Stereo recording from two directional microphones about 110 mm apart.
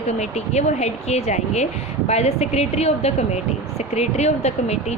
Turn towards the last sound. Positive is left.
turn(degrees=80)